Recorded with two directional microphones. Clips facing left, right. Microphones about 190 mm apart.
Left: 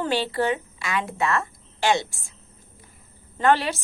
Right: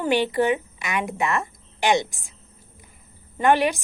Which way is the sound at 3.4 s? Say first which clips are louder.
Right 2 dB; 15° right (ahead or behind).